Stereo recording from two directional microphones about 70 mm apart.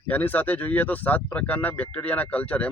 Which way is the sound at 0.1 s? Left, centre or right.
Left.